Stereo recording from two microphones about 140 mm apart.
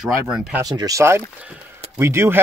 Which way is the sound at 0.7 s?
25° right (ahead or behind).